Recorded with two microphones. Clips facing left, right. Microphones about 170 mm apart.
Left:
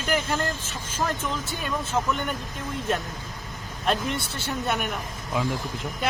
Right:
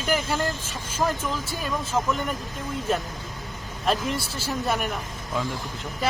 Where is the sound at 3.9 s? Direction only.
Centre (ahead or behind).